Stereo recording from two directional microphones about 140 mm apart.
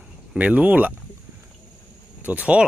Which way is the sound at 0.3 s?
10° right (ahead or behind).